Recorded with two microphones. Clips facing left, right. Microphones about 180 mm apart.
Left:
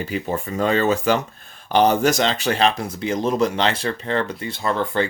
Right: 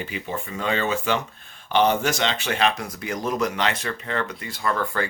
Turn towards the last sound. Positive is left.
turn(degrees=25)  # may be behind; listen again after turning